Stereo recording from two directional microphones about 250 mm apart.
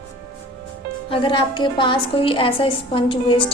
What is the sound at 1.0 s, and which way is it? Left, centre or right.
A woman's voice, left.